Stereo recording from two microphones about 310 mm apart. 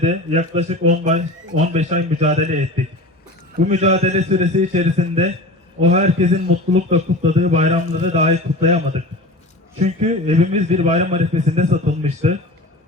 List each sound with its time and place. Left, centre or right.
0.0 s a man's voice: right